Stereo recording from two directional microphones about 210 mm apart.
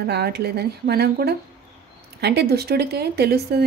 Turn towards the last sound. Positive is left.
turn(degrees=-50)  # may be behind; listen again after turning